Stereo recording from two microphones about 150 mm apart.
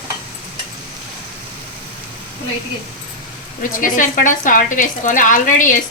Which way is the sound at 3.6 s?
65° left (ahead or behind).